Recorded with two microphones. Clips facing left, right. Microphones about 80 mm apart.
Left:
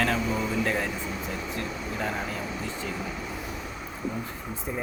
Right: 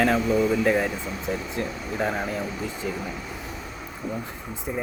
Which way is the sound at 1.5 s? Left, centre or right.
Right.